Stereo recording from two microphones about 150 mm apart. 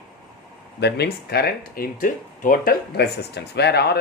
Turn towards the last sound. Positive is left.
turn(degrees=90)